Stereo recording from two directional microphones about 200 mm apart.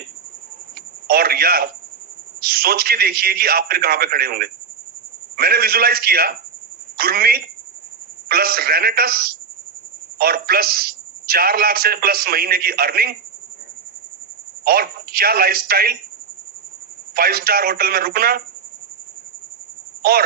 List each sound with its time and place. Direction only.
1.0 s a sound: 50° right (ahead or behind)
2.4 s a man's voice: 50° right (ahead or behind)
14.6 s a man's voice: 50° right (ahead or behind)
17.2 s a man's voice: 50° right (ahead or behind)
20.0 s speech: 50° right (ahead or behind)